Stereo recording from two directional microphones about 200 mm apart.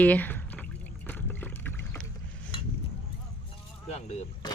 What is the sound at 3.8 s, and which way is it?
Vehicle, 30° left (ahead or behind).